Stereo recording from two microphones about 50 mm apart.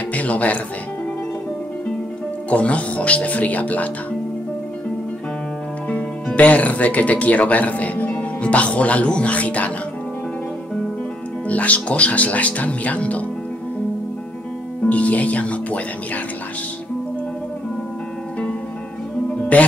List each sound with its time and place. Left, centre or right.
0.1 s speech: left
2.5 s speech: left
6.3 s speech: left
11.4 s speech: left
14.9 s speech: left
19.5 s speech: left